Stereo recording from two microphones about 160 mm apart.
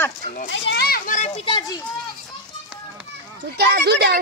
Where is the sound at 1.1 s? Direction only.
45° left (ahead or behind).